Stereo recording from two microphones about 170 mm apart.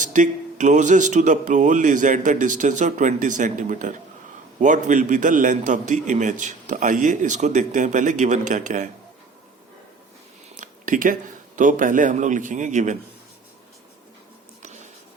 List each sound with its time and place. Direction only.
0.0 s a man's voice: 50° right (ahead or behind)
10.6 s speech: 50° right (ahead or behind)
14.6 s a sound: 40° right (ahead or behind)